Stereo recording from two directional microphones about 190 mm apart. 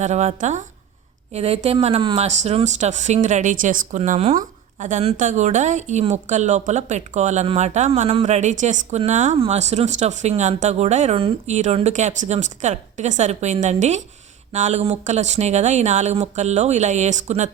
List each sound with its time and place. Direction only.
0.0 s speech: 35° right (ahead or behind)